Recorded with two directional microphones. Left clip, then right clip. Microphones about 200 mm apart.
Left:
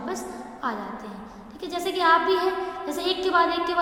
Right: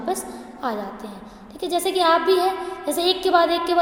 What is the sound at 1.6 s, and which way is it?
A woman's voice, 55° right (ahead or behind).